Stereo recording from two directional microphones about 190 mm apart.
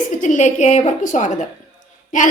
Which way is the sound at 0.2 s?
40° left (ahead or behind).